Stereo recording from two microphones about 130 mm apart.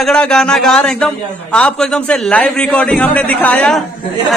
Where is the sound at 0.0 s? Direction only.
5° left (ahead or behind).